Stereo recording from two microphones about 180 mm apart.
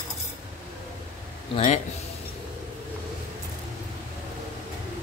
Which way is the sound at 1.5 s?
40° left (ahead or behind).